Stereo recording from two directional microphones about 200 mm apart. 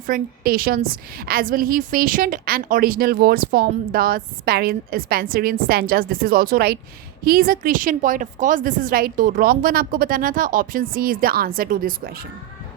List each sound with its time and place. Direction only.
0.1 s a woman's voice: 50° right (ahead or behind)